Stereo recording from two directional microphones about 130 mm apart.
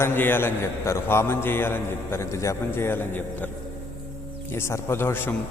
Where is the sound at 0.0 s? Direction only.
15° left (ahead or behind).